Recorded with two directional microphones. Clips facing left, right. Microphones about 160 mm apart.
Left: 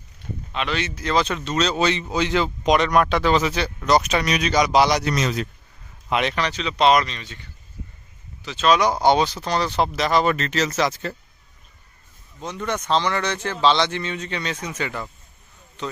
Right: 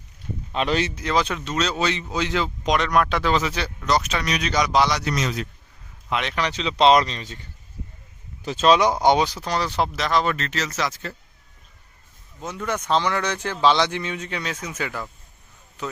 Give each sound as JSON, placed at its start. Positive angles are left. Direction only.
{"t": 0.5, "sound": "speech", "side_deg": -35}
{"t": 0.9, "sound": "speech", "side_deg": -10}
{"t": 3.8, "sound": "speech", "side_deg": 15}
{"t": 5.0, "sound": "a man's voice", "side_deg": 55}
{"t": 6.3, "sound": "speech", "side_deg": -20}
{"t": 8.6, "sound": "speech", "side_deg": -25}
{"t": 12.4, "sound": "speech", "side_deg": -5}